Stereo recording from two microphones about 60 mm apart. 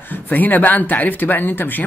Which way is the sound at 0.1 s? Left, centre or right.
Left.